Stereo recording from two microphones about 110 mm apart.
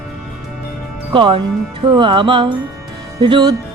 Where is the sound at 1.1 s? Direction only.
50° right (ahead or behind).